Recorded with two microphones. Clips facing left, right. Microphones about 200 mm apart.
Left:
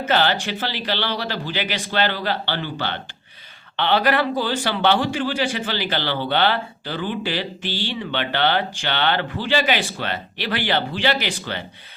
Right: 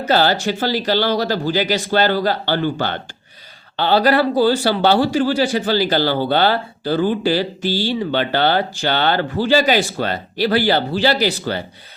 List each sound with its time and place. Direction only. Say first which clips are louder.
0.0 s a man's voice: right 4 dB; 40° right (ahead or behind)